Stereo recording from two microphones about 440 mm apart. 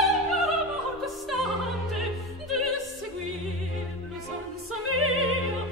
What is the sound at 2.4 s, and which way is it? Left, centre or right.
Opera, centre.